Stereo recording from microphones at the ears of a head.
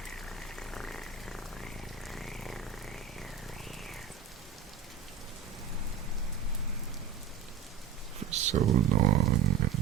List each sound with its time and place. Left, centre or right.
0.8 s purr: centre
8.2 s speech: right